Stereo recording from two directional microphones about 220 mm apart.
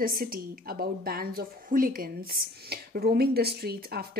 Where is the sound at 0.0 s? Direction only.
40° right (ahead or behind).